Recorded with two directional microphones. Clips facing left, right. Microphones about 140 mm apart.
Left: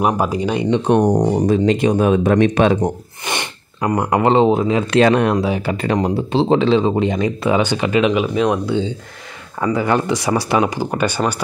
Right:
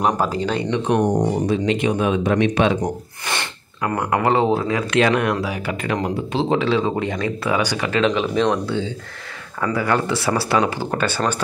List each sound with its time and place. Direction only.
0.0 s speech: 15° left (ahead or behind)
0.7 s speech: 35° left (ahead or behind)
2.8 s speech: 20° left (ahead or behind)
4.9 s speech: 30° left (ahead or behind); by 11.4 s 15° left (ahead or behind)